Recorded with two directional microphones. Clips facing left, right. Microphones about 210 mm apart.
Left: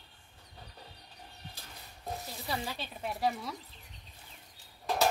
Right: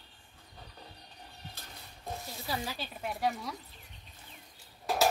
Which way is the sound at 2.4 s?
5° right (ahead or behind).